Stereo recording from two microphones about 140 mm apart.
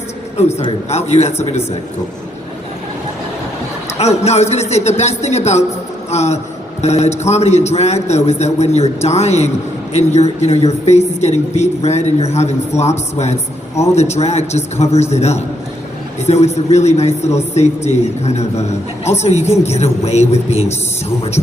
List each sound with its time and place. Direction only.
0.3 s a man's voice: 50° left (ahead or behind)
3.9 s a woman's voice: 50° left (ahead or behind)